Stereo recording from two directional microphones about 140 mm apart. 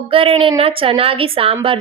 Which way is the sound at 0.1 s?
40° right (ahead or behind).